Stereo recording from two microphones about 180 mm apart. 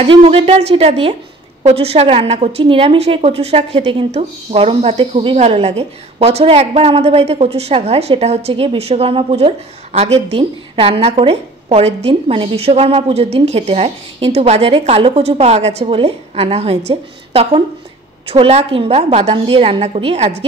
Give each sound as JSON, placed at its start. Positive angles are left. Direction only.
{"t": 0.0, "sound": "speech", "side_deg": -35}